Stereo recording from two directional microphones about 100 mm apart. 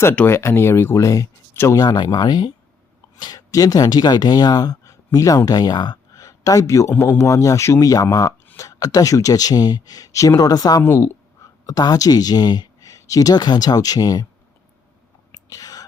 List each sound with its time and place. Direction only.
0.0 s speech: 25° left (ahead or behind)
1.8 s speech: 45° left (ahead or behind)
10.8 s speech: 25° left (ahead or behind)
11.6 s speech: 40° left (ahead or behind)
15.3 s whispering: 35° left (ahead or behind)